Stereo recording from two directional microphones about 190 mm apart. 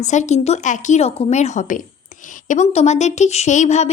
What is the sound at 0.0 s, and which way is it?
A woman's voice, 40° left (ahead or behind).